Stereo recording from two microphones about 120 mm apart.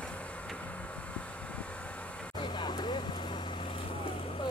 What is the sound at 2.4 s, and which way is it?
Vehicle, 40° left (ahead or behind).